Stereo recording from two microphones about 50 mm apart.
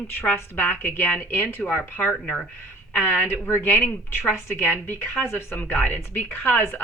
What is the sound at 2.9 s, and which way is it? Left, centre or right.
A woman's voice, left.